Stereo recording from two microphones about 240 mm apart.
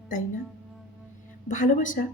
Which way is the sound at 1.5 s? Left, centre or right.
Left.